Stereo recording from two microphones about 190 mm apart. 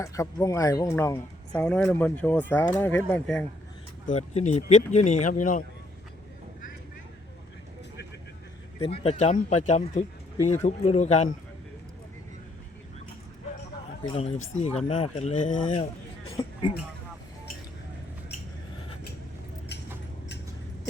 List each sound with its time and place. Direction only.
0.0 s speech: 15° left (ahead or behind)
4.0 s speech: 35° left (ahead or behind)
8.8 s speech: 30° left (ahead or behind)
14.0 s speech: 30° left (ahead or behind)
15.7 s a sound: 25° left (ahead or behind)